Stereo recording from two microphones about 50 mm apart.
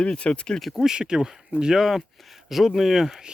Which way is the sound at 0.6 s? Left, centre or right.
Centre.